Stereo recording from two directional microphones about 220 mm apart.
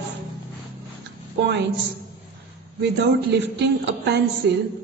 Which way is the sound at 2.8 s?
50° right (ahead or behind).